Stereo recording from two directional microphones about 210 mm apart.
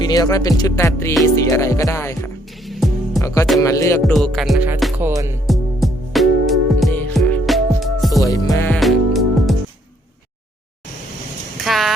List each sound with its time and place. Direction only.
0.0 s music: 20° left (ahead or behind)
2.6 s music: centre (ahead or behind)
3.2 s speech: 15° left (ahead or behind)
3.6 s music: 15° left (ahead or behind)
4.0 s music: centre (ahead or behind)
5.0 s speech: 10° right (ahead or behind)
5.5 s music: centre (ahead or behind)
8.2 s music: 15° left (ahead or behind); by 9.6 s centre (ahead or behind)
11.6 s a sound: centre (ahead or behind)